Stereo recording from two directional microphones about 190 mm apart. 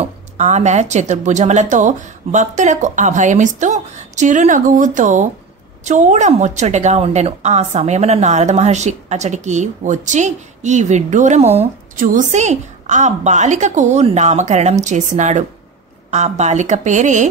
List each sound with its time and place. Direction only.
0.0 s a woman's voice: 35° right (ahead or behind)